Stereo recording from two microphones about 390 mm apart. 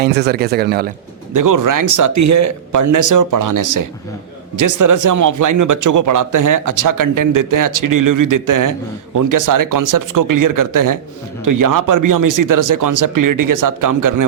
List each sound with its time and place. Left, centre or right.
0.0 s speech: right
1.3 s speech: right